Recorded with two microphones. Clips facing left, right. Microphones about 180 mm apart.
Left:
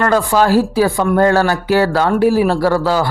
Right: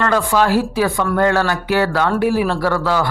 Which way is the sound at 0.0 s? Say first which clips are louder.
Left 3 dB; 40° left (ahead or behind).